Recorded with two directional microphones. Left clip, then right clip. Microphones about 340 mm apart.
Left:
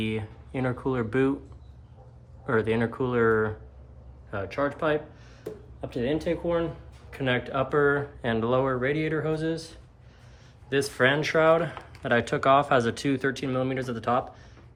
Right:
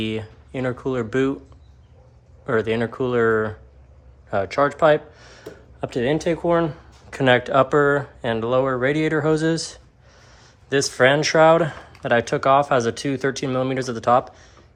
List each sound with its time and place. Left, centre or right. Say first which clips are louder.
0.0 s speech: right 5 dB; centre
2.5 s speech: right 4 dB; centre